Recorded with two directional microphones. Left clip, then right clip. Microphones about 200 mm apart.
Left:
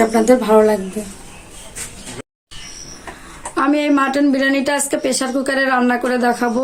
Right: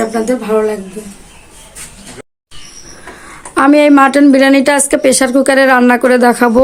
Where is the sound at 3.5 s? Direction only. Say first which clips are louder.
Right 9 dB; 40° right (ahead or behind).